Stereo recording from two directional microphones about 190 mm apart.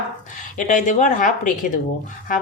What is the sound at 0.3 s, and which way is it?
Speech, 45° left (ahead or behind).